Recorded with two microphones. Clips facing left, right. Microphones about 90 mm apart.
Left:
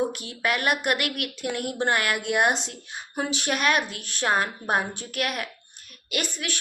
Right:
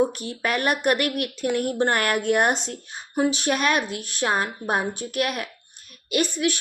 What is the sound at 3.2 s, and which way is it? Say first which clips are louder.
A woman's voice: right 5 dB; 25° right (ahead or behind).